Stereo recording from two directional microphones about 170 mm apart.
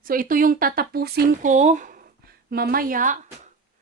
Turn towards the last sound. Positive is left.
turn(degrees=-50)  # may be behind; listen again after turning